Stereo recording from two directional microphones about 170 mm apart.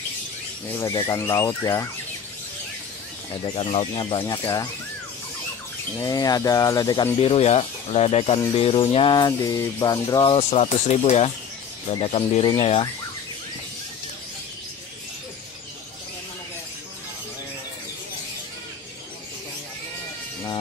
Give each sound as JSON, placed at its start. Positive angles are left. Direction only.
{"t": 0.7, "sound": "speech", "side_deg": 20}
{"t": 3.4, "sound": "speech", "side_deg": 30}
{"t": 6.0, "sound": "speech", "side_deg": 20}
{"t": 7.2, "sound": "music", "side_deg": 35}